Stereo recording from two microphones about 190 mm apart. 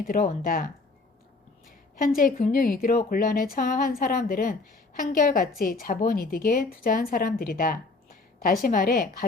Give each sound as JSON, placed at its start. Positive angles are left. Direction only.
{"t": 0.0, "sound": "a woman's voice", "side_deg": 50}
{"t": 2.0, "sound": "a woman's voice", "side_deg": 45}